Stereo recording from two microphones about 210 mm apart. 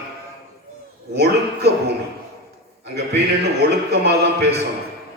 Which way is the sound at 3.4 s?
55° right (ahead or behind).